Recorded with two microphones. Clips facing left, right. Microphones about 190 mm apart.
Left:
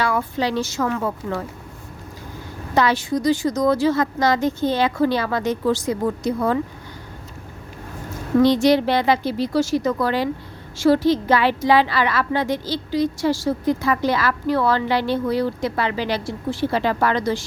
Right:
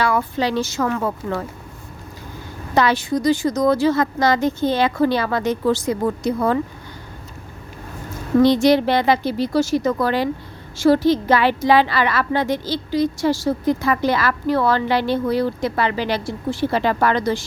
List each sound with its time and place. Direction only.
0.0 s speech: 70° right (ahead or behind)
2.7 s a woman's voice: 60° right (ahead or behind)
8.5 s a woman's voice: 50° right (ahead or behind)